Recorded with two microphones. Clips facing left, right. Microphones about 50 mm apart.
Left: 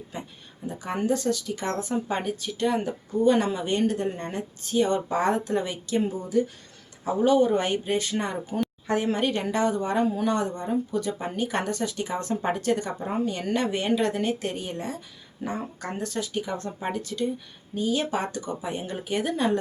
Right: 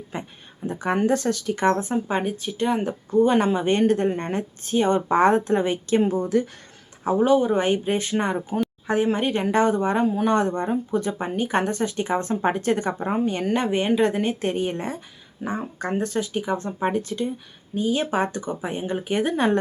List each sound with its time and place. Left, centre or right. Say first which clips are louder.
0.1 s a sound: right 5 dB; right
0.7 s speech: right 5 dB; right
2.8 s a woman's voice: right 3 dB; right
6.1 s speech: right 4 dB; right
7.0 s speech: right 4 dB; right
7.3 s speech: even; centre; by 8.5 s right
9.1 s speech: right 2 dB; centre
9.5 s a woman's voice: right 5 dB; right
10.2 s speech: right 5 dB; right
10.7 s a woman's voice: right 3 dB; right
15.4 s speech: right 4 dB; right
16.5 s speech: right 5 dB; centre
16.8 s a woman's voice: right 3 dB; right